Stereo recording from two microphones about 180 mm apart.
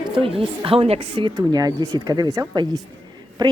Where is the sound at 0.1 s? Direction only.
30° right (ahead or behind).